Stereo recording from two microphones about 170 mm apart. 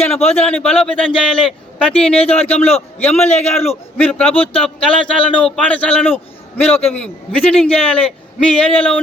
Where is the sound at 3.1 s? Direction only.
40° left (ahead or behind).